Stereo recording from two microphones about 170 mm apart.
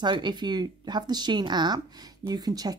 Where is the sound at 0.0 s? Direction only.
25° right (ahead or behind).